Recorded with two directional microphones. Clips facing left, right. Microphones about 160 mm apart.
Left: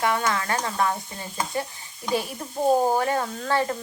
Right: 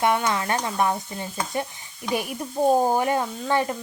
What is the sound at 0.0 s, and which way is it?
Speech, 20° right (ahead or behind).